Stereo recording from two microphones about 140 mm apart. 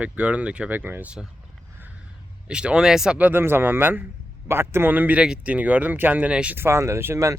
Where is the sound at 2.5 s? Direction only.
5° right (ahead or behind).